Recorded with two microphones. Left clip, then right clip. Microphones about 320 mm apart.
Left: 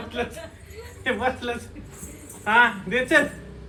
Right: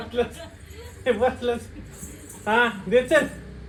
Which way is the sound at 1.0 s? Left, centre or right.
Left.